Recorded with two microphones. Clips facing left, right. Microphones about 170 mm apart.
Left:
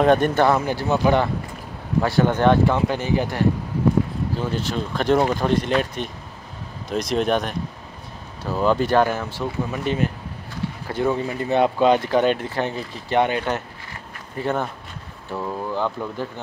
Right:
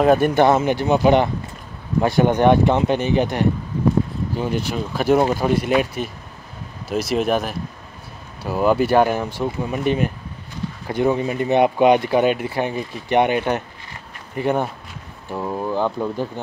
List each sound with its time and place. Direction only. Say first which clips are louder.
0.0 s speech: right 2 dB; 5° right (ahead or behind)